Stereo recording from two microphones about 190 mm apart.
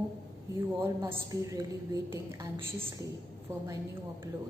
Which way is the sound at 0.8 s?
15° right (ahead or behind).